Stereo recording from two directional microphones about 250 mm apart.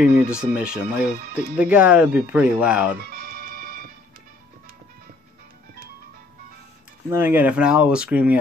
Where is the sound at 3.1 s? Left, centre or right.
Right.